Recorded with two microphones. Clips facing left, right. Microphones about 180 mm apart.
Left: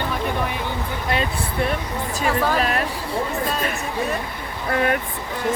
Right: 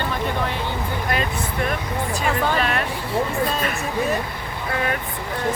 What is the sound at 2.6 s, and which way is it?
Speech, 35° left (ahead or behind).